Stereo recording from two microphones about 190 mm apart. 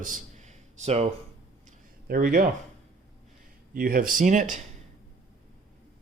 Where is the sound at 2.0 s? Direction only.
50° right (ahead or behind).